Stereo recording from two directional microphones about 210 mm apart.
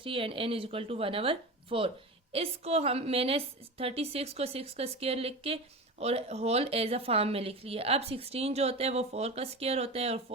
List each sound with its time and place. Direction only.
0.0 s a woman's voice: 25° right (ahead or behind)